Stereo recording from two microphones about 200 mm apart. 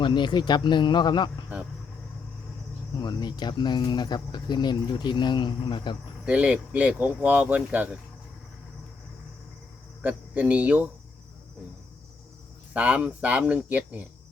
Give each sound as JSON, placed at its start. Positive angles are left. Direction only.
{"t": 0.0, "sound": "speech", "side_deg": 25}
{"t": 3.0, "sound": "speech", "side_deg": 20}
{"t": 6.2, "sound": "speech", "side_deg": -5}
{"t": 10.0, "sound": "speech", "side_deg": -10}
{"t": 12.7, "sound": "speech", "side_deg": -5}